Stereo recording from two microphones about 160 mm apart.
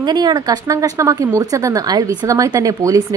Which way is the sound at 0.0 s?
25° right (ahead or behind).